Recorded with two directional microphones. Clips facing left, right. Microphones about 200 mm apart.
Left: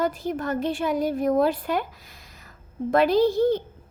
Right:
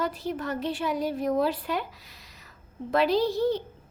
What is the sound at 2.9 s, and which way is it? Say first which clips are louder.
Speech: left 4 dB; 50° left (ahead or behind).